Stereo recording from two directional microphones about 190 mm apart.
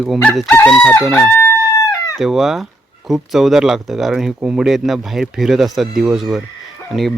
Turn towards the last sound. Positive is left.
turn(degrees=0)  # may be behind; listen again after turning